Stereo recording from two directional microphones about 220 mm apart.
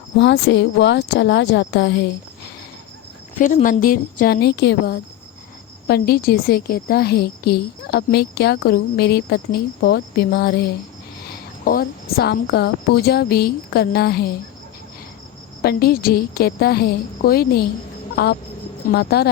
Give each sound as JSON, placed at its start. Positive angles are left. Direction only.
{"t": 0.2, "sound": "a woman's voice", "side_deg": 50}
{"t": 3.3, "sound": "a woman's voice", "side_deg": 35}
{"t": 15.6, "sound": "a woman's voice", "side_deg": 45}
{"t": 18.9, "sound": "a woman's voice", "side_deg": 45}